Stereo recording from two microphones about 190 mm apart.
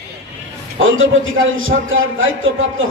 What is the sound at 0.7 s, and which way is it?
A man's voice, 90° right.